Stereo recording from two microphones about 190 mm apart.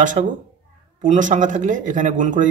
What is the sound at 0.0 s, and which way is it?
Speech, 40° right (ahead or behind).